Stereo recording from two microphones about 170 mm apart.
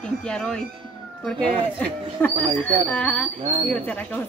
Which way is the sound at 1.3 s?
30° right (ahead or behind).